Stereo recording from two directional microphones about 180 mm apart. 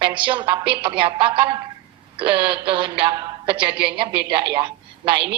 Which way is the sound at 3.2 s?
20° right (ahead or behind).